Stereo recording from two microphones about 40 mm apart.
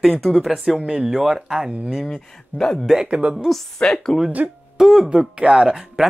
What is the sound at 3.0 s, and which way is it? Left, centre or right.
Speech, right.